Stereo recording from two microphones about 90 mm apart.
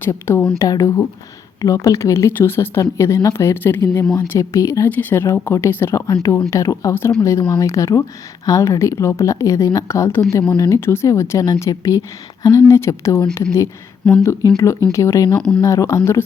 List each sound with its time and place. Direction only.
0.0 s speech: 25° left (ahead or behind)
0.6 s a woman's voice: 35° left (ahead or behind)
2.8 s a woman's voice: 40° left (ahead or behind)
4.9 s a woman's voice: 20° left (ahead or behind)
14.0 s speech: 10° left (ahead or behind)
14.5 s a woman's voice: 35° left (ahead or behind)
15.4 s speech: 10° left (ahead or behind)
15.6 s a woman's voice: 35° left (ahead or behind)